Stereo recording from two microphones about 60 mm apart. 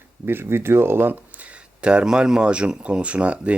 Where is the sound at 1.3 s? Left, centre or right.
Right.